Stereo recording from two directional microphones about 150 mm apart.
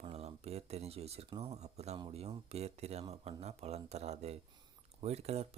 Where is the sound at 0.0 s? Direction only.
45° right (ahead or behind).